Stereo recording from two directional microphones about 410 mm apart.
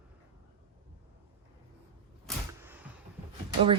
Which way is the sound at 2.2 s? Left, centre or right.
Centre.